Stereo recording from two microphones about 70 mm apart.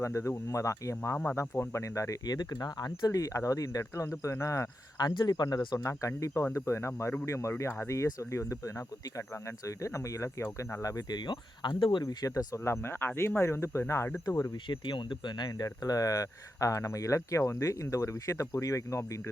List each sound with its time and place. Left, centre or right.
0.0 s speech: left
1.1 s speech: left
1.4 s speech: left
2.2 s speech: left
4.9 s speech: left
5.9 s speech: left
10.6 s speech: left
10.8 s speech: left
12.0 s speech: left
12.5 s speech: left
14.5 s speech: left